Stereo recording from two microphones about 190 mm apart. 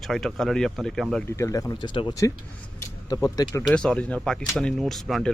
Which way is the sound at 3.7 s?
5° left (ahead or behind).